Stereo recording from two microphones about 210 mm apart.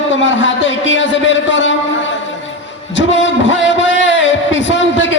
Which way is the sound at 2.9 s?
60° left (ahead or behind).